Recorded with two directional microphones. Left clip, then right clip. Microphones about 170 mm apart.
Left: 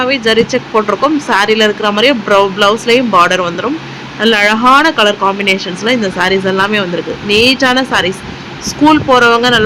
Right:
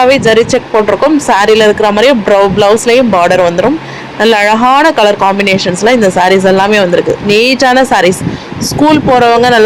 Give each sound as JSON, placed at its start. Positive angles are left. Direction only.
{"t": 0.0, "sound": "speech", "side_deg": -20}